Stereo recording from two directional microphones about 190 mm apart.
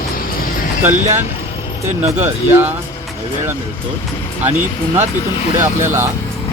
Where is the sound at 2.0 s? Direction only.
10° right (ahead or behind).